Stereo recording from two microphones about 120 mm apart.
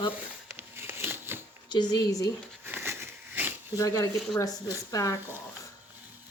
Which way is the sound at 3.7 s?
30° left (ahead or behind).